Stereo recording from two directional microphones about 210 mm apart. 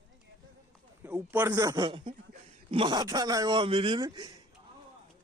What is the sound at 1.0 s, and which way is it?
A man's voice, 10° right (ahead or behind).